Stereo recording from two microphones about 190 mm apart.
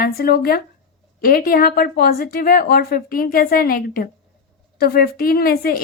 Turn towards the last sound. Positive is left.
turn(degrees=50)  # may be behind; listen again after turning